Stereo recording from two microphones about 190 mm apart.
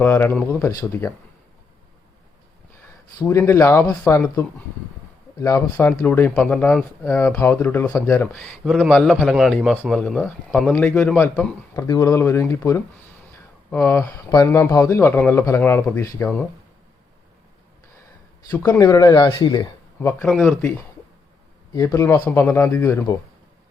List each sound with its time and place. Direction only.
0.0 s speech: 10° left (ahead or behind)
3.2 s speech: 15° left (ahead or behind)
8.6 s a man's voice: centre (ahead or behind)
18.8 s speech: 20° left (ahead or behind)
20.2 s a man's voice: centre (ahead or behind)
21.7 s speech: 20° left (ahead or behind)